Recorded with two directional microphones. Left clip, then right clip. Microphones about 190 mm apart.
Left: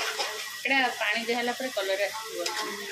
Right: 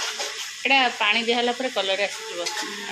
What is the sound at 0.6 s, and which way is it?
Speech, 35° right (ahead or behind).